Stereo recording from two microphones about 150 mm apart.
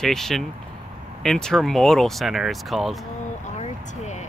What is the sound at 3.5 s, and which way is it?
Vehicle, 50° left (ahead or behind).